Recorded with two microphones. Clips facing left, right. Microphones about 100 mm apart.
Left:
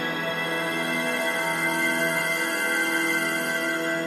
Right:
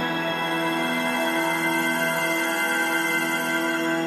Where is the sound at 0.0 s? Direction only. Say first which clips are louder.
Right 3 dB; 35° right (ahead or behind).